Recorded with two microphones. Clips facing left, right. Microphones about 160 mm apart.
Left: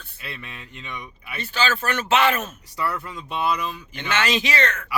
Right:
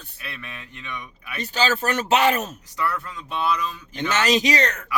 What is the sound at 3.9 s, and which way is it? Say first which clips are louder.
Speech: right 3 dB; 40° right (ahead or behind).